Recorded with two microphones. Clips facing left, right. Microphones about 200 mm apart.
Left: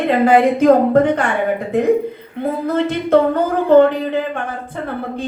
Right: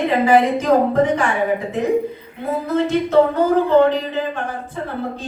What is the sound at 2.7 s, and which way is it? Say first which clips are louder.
A woman's voice: left 2 dB; 55° left (ahead or behind).